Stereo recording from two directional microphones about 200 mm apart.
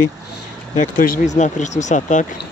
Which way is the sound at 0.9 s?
45° left (ahead or behind).